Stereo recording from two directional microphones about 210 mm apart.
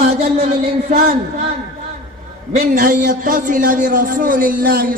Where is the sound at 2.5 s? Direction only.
40° right (ahead or behind).